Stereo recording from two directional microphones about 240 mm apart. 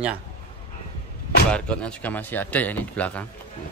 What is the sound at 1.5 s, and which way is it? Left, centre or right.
Speech, centre.